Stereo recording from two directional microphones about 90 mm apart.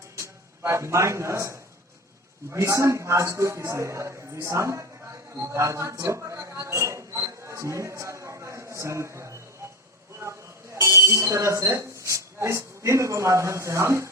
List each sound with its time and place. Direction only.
0.2 s a man's voice: 30° right (ahead or behind)
5.3 s a sound: 35° right (ahead or behind)
10.8 s speech: 30° right (ahead or behind)